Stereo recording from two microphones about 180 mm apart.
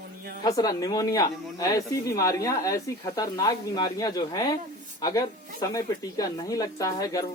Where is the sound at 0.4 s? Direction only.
20° left (ahead or behind).